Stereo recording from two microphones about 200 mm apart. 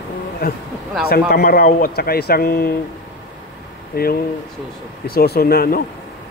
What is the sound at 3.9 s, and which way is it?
Speech, 50° left (ahead or behind).